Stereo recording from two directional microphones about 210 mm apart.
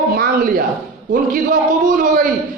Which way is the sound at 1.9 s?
35° right (ahead or behind).